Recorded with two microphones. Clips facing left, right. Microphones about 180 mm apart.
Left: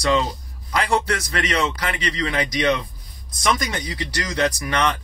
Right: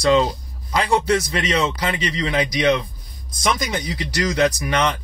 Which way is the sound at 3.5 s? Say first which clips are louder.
Right 2 dB; 20° right (ahead or behind).